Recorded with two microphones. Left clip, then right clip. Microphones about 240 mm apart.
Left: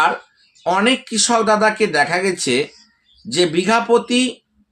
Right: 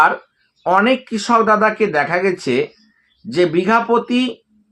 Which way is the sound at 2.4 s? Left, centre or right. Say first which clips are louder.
Even; centre.